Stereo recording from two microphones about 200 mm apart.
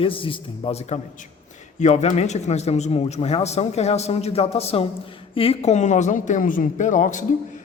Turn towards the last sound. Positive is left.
turn(degrees=40)  # may be behind; listen again after turning